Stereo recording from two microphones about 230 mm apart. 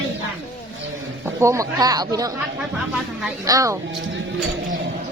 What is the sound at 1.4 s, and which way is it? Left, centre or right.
Speech, centre.